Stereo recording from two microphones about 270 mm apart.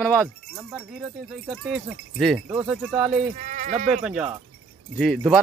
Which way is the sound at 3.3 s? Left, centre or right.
Right.